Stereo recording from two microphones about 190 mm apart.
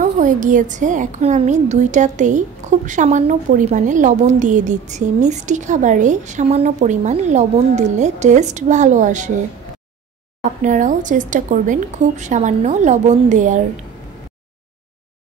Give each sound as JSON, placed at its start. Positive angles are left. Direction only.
{"t": 0.0, "sound": "a woman's voice", "side_deg": -40}
{"t": 10.6, "sound": "a woman's voice", "side_deg": -40}